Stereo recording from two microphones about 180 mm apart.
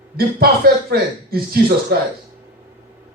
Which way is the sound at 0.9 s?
60° right (ahead or behind).